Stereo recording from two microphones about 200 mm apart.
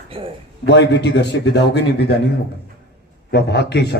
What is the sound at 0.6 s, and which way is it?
A man's voice, 60° left (ahead or behind).